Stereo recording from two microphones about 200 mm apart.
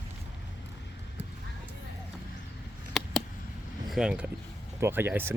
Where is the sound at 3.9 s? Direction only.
5° right (ahead or behind).